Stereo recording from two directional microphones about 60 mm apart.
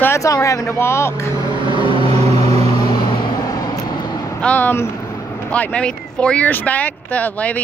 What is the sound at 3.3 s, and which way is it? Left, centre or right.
Vehicle, left.